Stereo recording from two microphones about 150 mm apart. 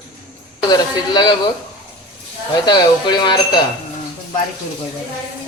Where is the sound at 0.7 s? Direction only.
30° left (ahead or behind).